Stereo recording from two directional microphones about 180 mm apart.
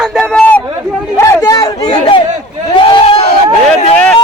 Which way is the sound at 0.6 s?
25° right (ahead or behind).